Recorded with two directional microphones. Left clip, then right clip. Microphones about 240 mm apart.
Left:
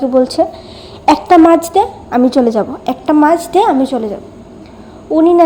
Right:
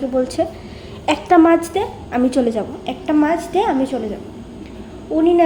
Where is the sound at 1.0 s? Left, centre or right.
Left.